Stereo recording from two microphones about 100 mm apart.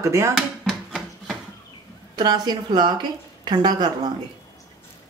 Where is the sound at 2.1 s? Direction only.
45° right (ahead or behind).